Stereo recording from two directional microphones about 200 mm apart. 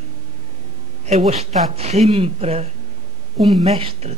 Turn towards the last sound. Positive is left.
turn(degrees=-30)  # may be behind; listen again after turning